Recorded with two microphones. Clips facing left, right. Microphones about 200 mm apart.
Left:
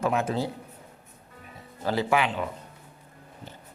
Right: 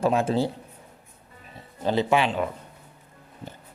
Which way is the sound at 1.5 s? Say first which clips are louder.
Right 3 dB; 20° right (ahead or behind).